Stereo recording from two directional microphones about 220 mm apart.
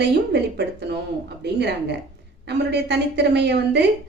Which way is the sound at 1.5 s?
50° right (ahead or behind).